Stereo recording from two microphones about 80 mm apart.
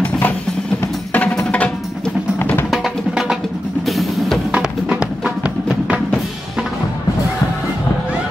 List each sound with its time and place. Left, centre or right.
1.1 s music: centre
2.3 s music: left
2.7 s music: centre
4.5 s music: centre